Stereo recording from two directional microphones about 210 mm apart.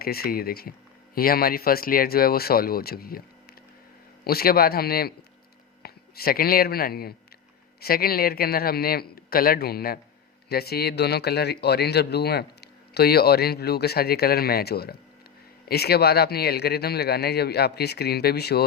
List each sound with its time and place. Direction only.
0.0 s speech: 45° left (ahead or behind)